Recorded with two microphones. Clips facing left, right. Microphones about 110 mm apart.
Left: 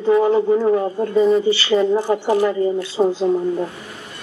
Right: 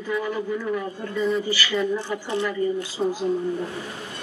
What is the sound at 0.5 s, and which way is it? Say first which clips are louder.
A woman's voice: left 11 dB; 45° left (ahead or behind).